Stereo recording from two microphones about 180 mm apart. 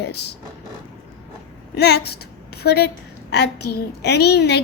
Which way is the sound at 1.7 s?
65° left (ahead or behind).